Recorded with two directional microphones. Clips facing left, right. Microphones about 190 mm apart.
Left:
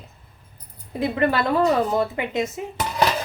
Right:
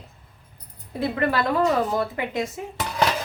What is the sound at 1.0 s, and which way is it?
A woman's voice, 20° left (ahead or behind).